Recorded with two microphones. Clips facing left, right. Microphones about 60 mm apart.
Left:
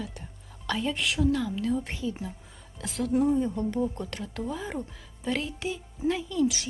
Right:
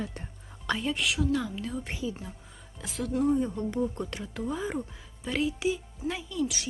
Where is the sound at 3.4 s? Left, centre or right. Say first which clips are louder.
Left 2 dB; centre.